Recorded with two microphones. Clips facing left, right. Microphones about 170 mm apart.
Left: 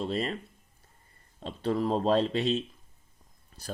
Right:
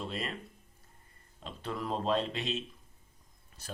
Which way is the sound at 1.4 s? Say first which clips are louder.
Left 9 dB; 35° left (ahead or behind).